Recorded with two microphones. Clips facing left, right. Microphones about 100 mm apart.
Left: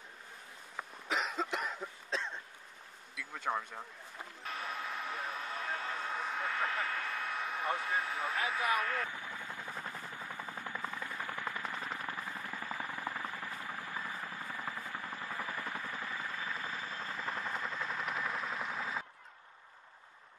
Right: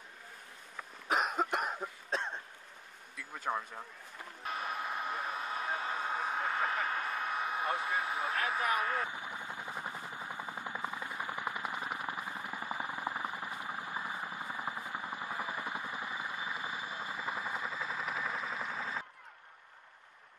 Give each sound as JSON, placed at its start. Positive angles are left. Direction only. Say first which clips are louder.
{"t": 1.0, "sound": "cough", "louder": "right 4 dB", "side_deg": -50}
{"t": 2.0, "sound": "throat clearing", "louder": "right 2 dB", "side_deg": -55}
{"t": 3.2, "sound": "a sound", "louder": "even", "side_deg": 0}
{"t": 6.6, "sound": "speech", "louder": "even", "side_deg": -10}
{"t": 6.9, "sound": "vehicle", "louder": "right 3 dB", "side_deg": -15}
{"t": 8.5, "sound": "helicopter", "louder": "even", "side_deg": -20}